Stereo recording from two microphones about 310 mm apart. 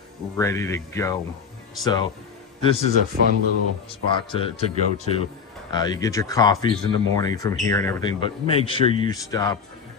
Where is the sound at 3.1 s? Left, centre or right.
Right.